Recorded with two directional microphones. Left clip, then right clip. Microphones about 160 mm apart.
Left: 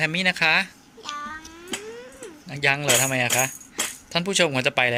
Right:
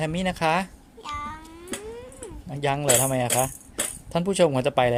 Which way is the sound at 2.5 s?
30° right (ahead or behind).